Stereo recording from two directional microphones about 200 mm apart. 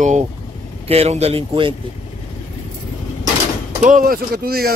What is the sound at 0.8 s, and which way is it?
Speech, 30° right (ahead or behind).